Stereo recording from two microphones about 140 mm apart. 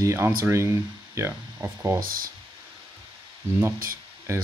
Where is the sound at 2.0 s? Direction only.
90° right.